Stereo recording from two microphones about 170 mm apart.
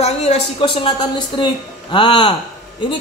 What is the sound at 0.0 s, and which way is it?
A woman's voice, 40° left (ahead or behind).